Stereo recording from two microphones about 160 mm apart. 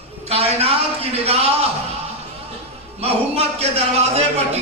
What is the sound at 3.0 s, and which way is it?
A man's voice, 40° right (ahead or behind).